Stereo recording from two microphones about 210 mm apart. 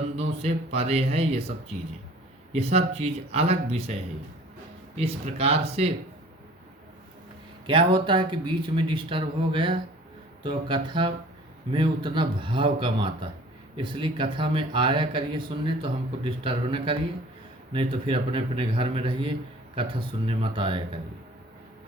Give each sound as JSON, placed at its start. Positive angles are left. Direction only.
{"t": 0.2, "sound": "speech", "side_deg": -30}
{"t": 2.5, "sound": "speech", "side_deg": -30}
{"t": 4.9, "sound": "speech", "side_deg": -30}
{"t": 7.7, "sound": "speech", "side_deg": -25}